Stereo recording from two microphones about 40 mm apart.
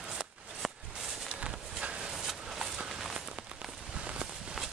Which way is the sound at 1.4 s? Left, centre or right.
Right.